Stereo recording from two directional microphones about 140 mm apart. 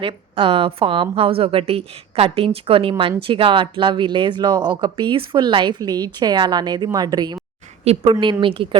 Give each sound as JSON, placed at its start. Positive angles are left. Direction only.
{"t": 0.0, "sound": "speech", "side_deg": -40}